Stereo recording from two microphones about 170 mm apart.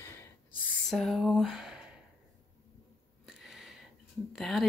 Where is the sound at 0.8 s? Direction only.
Centre (ahead or behind).